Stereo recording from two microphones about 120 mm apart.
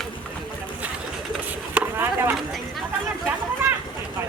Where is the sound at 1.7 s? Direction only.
15° right (ahead or behind).